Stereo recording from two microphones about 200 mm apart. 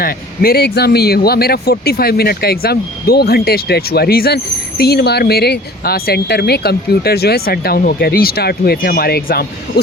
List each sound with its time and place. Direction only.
0.0 s speech: 50° left (ahead or behind)